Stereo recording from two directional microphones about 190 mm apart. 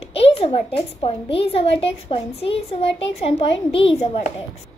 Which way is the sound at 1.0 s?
30° left (ahead or behind).